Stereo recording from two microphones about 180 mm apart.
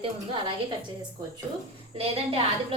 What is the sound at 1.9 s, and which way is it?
Speech, 35° right (ahead or behind).